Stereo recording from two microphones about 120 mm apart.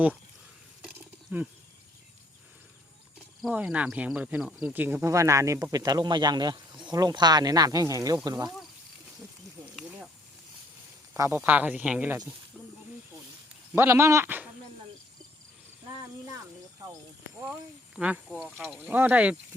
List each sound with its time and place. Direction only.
1.3 s speech: 15° right (ahead or behind)
3.5 s speech: 10° right (ahead or behind); by 8.4 s 30° right (ahead or behind)
9.6 s snake: 30° right (ahead or behind)
11.3 s speech: 15° right (ahead or behind)
13.7 s speech: 20° right (ahead or behind)
17.4 s speech: 10° right (ahead or behind)
18.8 s speech: 15° right (ahead or behind)